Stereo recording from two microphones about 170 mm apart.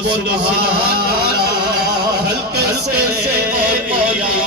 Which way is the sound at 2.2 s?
70° right (ahead or behind).